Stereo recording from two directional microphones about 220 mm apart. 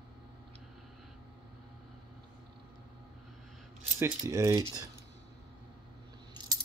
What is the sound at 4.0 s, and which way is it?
Speech, 15° right (ahead or behind).